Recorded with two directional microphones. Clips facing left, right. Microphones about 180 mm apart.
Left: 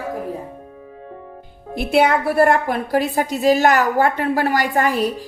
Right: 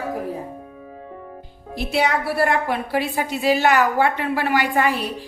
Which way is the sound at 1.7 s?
55° left (ahead or behind).